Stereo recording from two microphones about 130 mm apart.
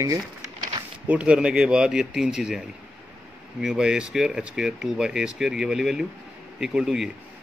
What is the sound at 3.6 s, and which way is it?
A man's voice, 5° right (ahead or behind).